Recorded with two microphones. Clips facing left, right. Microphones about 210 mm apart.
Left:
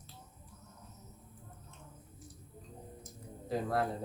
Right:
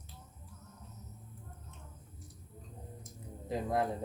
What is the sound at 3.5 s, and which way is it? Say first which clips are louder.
Speech: even; 20° right (ahead or behind).